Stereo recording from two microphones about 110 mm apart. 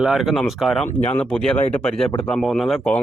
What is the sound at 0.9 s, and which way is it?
Speech, 85° left.